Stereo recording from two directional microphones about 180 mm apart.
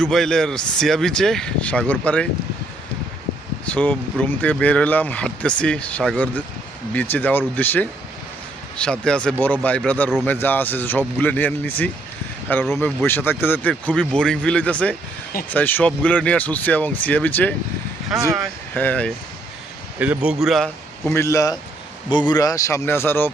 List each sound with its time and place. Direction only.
0.0 s speech: 5° left (ahead or behind)
3.7 s speech: 5° left (ahead or behind)
20.0 s a man's voice: 5° right (ahead or behind)
21.1 s speech: 15° left (ahead or behind)